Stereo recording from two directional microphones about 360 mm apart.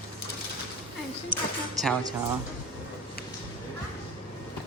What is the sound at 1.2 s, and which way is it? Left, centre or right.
Music, centre.